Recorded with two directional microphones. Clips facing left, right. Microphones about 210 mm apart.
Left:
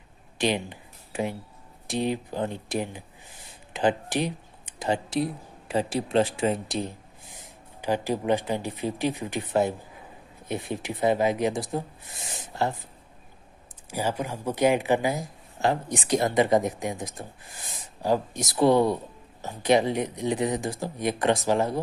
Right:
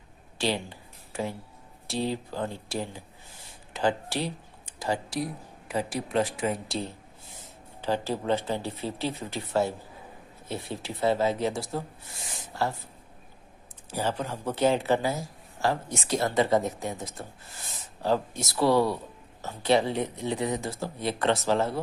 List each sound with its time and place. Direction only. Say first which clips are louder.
0.4 s a sound: left 3 dB; 20° left (ahead or behind)
1.9 s a woman's voice: left 3 dB; 20° left (ahead or behind)
13.8 s speech: left 1 dB; 10° left (ahead or behind)